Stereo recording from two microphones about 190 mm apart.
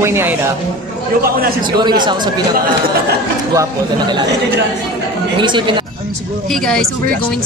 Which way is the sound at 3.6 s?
25° right (ahead or behind).